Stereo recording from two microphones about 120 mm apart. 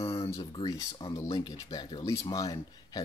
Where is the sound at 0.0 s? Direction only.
55° left (ahead or behind).